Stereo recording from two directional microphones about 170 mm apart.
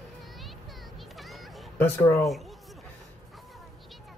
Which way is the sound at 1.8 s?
15° left (ahead or behind).